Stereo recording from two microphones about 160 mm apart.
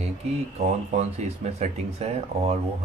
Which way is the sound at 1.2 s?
45° right (ahead or behind).